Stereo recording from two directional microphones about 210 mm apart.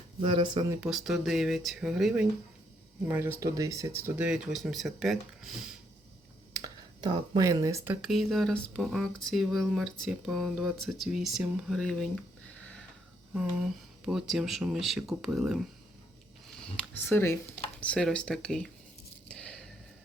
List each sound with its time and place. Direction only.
0.2 s speech: 25° right (ahead or behind)
0.8 s speech: centre (ahead or behind)
6.5 s speech: 20° right (ahead or behind)
8.0 s speech: centre (ahead or behind)
13.3 s speech: 5° right (ahead or behind)
16.7 s speech: 10° left (ahead or behind)
19.3 s a sound: 5° left (ahead or behind)